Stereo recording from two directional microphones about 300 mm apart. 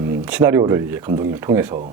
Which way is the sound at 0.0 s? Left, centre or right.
Centre.